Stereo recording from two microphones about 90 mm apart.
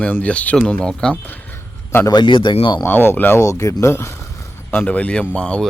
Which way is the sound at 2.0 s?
55° left (ahead or behind).